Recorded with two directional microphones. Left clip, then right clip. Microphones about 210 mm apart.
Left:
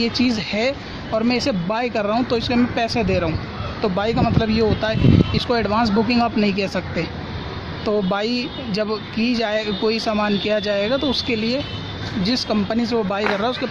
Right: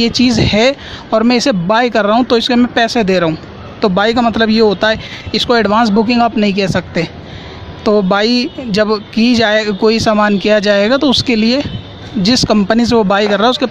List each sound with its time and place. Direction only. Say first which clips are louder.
0.0 s speech: right 8 dB; 40° right (ahead or behind)